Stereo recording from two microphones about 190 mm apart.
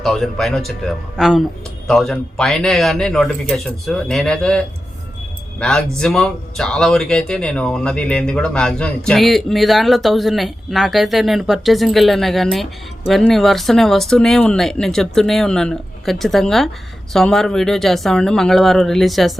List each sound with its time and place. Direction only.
0.0 s speech: centre (ahead or behind)